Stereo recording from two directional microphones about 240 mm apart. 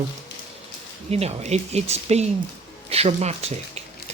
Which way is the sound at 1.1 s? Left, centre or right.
Right.